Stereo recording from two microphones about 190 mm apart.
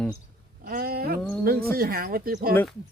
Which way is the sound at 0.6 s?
50° right (ahead or behind).